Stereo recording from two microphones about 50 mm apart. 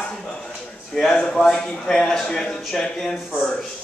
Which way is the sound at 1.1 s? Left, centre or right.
Centre.